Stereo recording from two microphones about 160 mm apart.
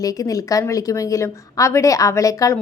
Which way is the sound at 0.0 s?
20° left (ahead or behind).